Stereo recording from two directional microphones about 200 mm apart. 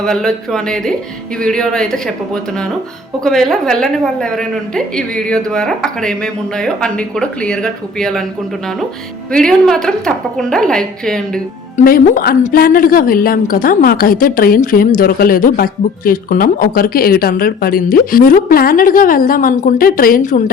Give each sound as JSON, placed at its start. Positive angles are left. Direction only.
{"t": 0.0, "sound": "a woman's voice", "side_deg": 0}
{"t": 9.3, "sound": "a woman's voice", "side_deg": 5}
{"t": 11.8, "sound": "a woman's voice", "side_deg": 45}